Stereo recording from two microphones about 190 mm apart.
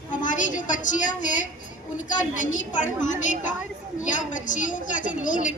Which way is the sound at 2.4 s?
40° left (ahead or behind).